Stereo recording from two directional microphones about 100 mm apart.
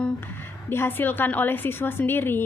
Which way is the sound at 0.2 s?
20° left (ahead or behind).